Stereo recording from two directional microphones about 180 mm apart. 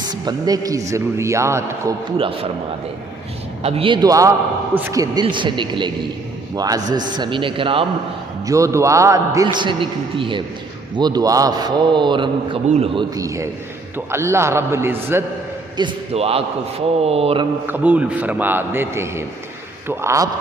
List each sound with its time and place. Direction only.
0.1 s a man's voice: 20° right (ahead or behind)
2.1 s a man's voice: 30° right (ahead or behind)
3.6 s a man's voice: 35° right (ahead or behind)
8.4 s a man's voice: 15° right (ahead or behind); by 13.1 s 35° right (ahead or behind)
13.1 s a man's voice: 15° right (ahead or behind)
15.8 s a man's voice: 30° right (ahead or behind)
17.7 s a man's voice: 10° right (ahead or behind)